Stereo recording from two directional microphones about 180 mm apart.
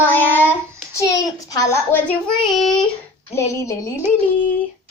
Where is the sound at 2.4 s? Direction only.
Centre (ahead or behind).